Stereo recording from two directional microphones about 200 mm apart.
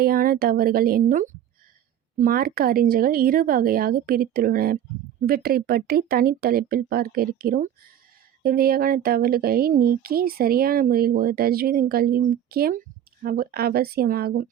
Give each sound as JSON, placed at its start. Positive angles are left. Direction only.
{"t": 0.0, "sound": "speech", "side_deg": -45}